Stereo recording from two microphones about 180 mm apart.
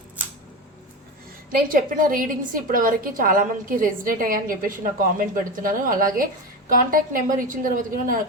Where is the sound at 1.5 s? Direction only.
50° right (ahead or behind).